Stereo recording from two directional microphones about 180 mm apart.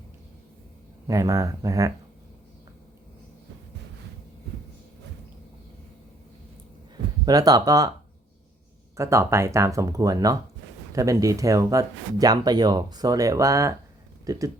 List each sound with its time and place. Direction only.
1.0 s speech: 20° right (ahead or behind)
7.3 s speech: 20° right (ahead or behind)
9.0 s speech: 15° right (ahead or behind)